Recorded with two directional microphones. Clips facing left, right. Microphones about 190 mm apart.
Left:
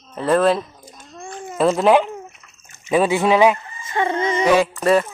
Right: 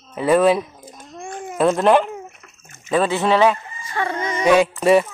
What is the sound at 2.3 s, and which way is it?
Dog, 55° right (ahead or behind).